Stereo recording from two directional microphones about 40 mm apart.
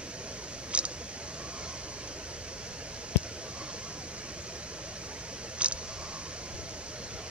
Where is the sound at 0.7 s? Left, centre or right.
Right.